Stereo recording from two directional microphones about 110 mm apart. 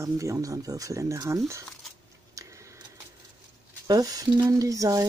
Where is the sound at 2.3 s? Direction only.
30° right (ahead or behind).